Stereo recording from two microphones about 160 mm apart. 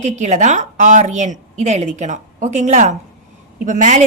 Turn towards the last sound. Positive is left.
turn(degrees=-50)  # may be behind; listen again after turning